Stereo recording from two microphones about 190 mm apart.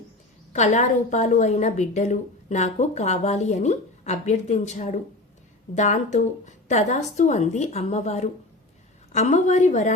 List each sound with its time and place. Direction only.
0.5 s a woman's voice: 40° left (ahead or behind)